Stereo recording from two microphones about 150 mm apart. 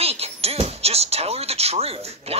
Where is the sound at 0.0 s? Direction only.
40° right (ahead or behind).